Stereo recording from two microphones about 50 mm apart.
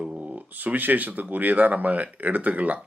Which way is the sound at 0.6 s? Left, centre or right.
Right.